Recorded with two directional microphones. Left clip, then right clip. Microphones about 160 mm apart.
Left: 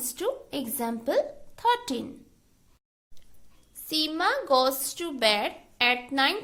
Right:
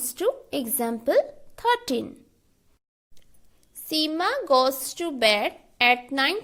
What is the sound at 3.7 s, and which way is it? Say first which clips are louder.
A woman's voice: right 3 dB; 35° right (ahead or behind).